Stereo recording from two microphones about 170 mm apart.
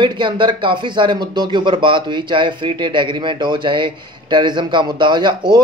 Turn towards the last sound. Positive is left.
turn(degrees=-25)  # may be behind; listen again after turning